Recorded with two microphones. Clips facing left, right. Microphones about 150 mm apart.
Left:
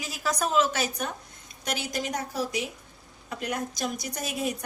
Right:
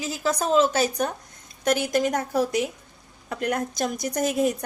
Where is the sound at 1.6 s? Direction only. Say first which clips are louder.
Right 9 dB; 55° right (ahead or behind).